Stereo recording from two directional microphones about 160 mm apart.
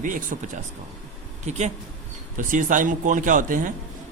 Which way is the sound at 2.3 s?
55° right (ahead or behind).